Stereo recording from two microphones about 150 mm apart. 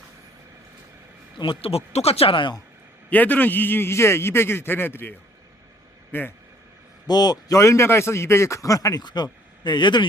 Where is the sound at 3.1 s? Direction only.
10° left (ahead or behind).